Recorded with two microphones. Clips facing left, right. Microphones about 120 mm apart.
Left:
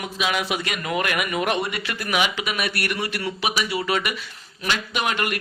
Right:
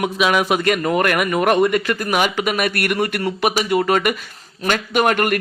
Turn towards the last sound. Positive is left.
turn(degrees=-50)  # may be behind; listen again after turning